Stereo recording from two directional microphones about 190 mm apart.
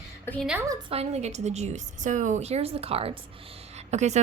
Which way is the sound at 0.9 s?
35° right (ahead or behind).